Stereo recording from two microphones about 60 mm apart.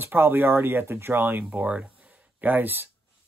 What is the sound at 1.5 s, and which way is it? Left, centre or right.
Speech, right.